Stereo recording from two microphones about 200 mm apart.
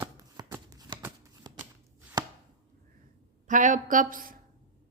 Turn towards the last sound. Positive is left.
turn(degrees=-45)  # may be behind; listen again after turning